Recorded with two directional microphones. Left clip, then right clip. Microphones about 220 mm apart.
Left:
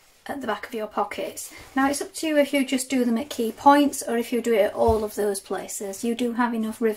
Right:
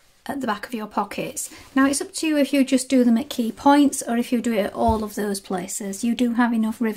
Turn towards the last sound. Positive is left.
turn(degrees=-45)  # may be behind; listen again after turning